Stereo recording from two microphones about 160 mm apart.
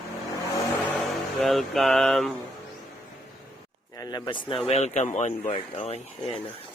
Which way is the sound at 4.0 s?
25° left (ahead or behind).